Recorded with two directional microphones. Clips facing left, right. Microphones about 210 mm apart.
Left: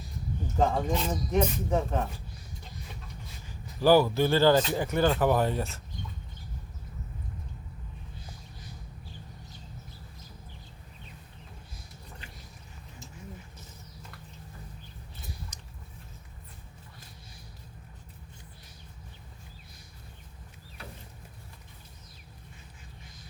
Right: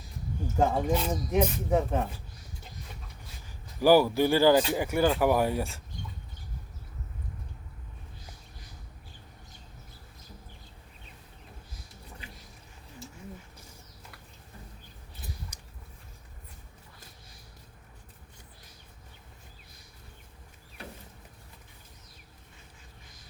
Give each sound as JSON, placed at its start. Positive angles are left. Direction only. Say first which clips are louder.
{"t": 0.4, "sound": "speech", "louder": "right 1 dB", "side_deg": -10}
{"t": 3.8, "sound": "speech", "louder": "right 1 dB", "side_deg": -15}
{"t": 15.5, "sound": "a sound", "louder": "left 2 dB", "side_deg": -10}